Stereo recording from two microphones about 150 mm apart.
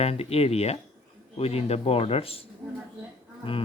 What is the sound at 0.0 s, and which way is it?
Speech, 40° left (ahead or behind).